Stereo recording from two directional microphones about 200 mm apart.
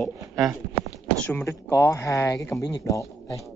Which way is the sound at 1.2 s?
10° left (ahead or behind).